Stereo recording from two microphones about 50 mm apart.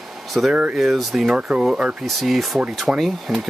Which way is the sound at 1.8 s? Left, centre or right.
Right.